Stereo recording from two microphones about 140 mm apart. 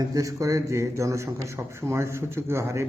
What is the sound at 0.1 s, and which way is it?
A man's voice, 25° right (ahead or behind).